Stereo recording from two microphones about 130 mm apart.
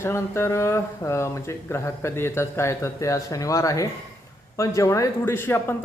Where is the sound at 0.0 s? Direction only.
20° left (ahead or behind).